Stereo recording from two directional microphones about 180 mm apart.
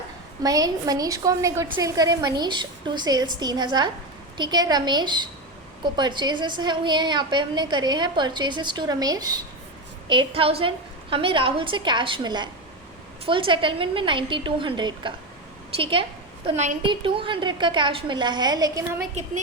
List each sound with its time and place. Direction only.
0.4 s a woman's voice: 20° right (ahead or behind)
16.5 s a woman's voice: 40° right (ahead or behind)
16.8 s a woman's voice: 30° right (ahead or behind)